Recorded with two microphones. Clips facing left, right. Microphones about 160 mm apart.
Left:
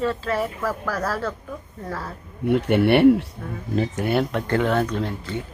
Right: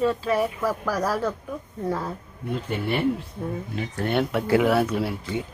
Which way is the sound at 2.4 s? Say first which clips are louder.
Left 10 dB; 75° left (ahead or behind).